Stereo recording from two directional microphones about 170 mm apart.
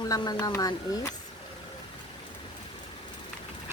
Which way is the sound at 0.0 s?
20° left (ahead or behind).